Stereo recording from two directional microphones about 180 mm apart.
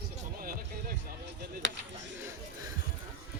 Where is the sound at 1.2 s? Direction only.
85° right.